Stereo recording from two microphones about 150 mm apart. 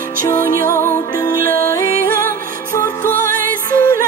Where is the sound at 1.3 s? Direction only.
70° right (ahead or behind).